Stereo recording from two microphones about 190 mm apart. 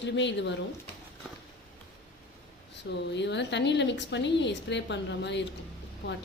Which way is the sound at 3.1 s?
65° left (ahead or behind).